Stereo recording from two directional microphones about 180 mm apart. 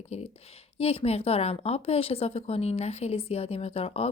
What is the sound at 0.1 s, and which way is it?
Speech, 35° left (ahead or behind).